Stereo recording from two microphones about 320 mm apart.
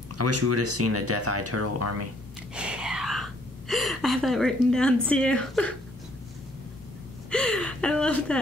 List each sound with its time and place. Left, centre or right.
0.2 s speech: right
2.5 s speech: centre
7.2 s speech: centre